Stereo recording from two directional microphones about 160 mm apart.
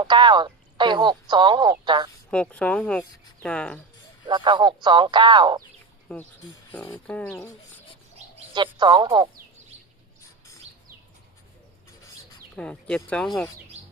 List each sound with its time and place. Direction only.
0.0 s speech: 30° right (ahead or behind)
2.3 s speech: 5° left (ahead or behind)
4.3 s speech: 30° right (ahead or behind)
6.1 s speech: 10° left (ahead or behind)
8.5 s speech: 30° right (ahead or behind)
12.5 s speech: 5° left (ahead or behind)